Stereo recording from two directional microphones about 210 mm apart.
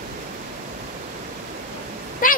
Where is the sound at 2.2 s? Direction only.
40° left (ahead or behind).